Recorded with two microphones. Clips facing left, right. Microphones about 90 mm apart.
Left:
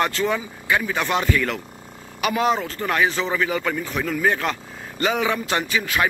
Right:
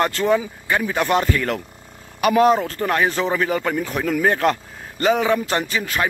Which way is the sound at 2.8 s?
30° right (ahead or behind).